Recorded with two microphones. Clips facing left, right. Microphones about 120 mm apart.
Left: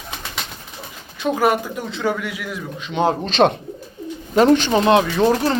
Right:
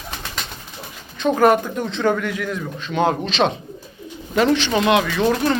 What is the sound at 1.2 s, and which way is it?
A man's voice, 5° left (ahead or behind).